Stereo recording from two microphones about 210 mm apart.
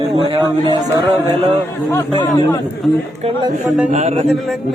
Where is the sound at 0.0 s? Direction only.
25° right (ahead or behind).